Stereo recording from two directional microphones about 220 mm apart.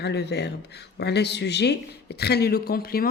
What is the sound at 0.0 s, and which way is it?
Speech, 50° left (ahead or behind).